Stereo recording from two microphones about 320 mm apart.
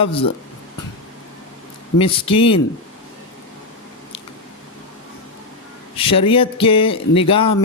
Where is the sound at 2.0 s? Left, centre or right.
Centre.